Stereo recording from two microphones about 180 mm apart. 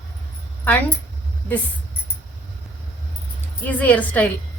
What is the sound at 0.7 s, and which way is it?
Speech, 10° left (ahead or behind).